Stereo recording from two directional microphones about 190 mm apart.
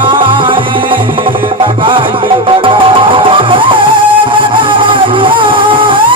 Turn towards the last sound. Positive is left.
turn(degrees=-25)  # may be behind; listen again after turning